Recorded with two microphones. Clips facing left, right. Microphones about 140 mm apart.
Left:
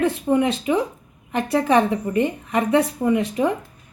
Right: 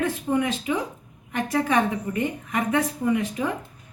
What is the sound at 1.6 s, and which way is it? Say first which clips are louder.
A woman's voice: left 5 dB; 25° left (ahead or behind).